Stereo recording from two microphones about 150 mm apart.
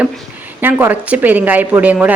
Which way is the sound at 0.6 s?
10° right (ahead or behind).